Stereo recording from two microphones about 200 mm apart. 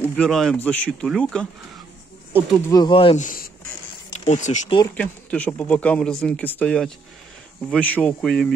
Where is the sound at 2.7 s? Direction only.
20° left (ahead or behind).